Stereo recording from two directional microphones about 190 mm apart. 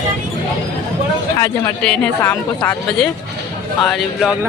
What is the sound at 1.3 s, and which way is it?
Speech, 15° left (ahead or behind).